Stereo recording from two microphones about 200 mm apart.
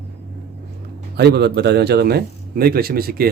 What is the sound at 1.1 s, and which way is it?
Speech, 55° right (ahead or behind).